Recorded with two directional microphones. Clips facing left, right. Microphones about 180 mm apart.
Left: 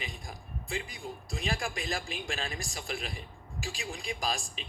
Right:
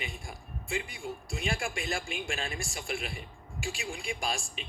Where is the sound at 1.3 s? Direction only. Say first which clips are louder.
Even; 35° left (ahead or behind).